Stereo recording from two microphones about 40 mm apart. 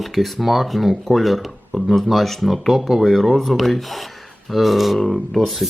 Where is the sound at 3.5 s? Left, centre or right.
Centre.